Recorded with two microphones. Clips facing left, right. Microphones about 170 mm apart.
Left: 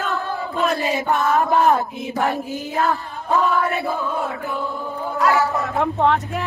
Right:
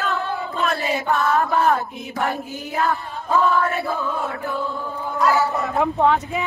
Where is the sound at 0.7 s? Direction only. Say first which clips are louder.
Left 1 dB; 20° left (ahead or behind).